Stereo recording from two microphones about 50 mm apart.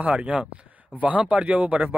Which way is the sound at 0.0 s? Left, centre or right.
Right.